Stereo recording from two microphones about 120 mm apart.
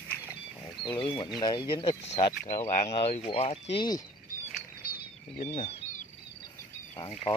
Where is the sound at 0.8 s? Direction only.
45° left (ahead or behind).